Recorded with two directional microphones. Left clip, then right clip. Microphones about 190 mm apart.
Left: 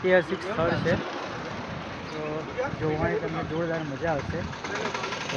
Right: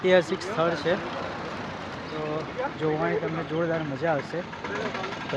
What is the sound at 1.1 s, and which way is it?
Vehicle, 65° right (ahead or behind).